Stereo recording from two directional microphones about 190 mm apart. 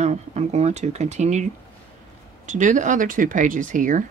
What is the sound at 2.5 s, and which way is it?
Speech, 40° right (ahead or behind).